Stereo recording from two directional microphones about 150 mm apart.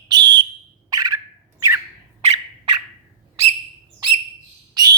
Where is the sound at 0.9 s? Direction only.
25° right (ahead or behind).